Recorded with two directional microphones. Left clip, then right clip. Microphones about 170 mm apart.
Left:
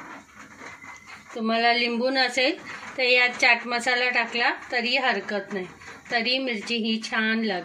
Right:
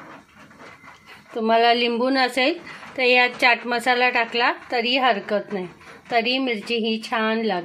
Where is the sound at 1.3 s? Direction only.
45° right (ahead or behind).